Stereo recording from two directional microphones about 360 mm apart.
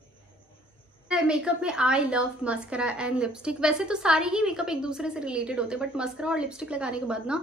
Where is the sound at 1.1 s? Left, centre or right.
Centre.